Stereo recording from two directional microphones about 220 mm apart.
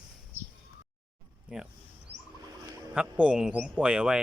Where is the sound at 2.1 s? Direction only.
30° right (ahead or behind).